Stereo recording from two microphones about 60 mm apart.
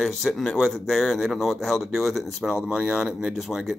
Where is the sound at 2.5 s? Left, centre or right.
Centre.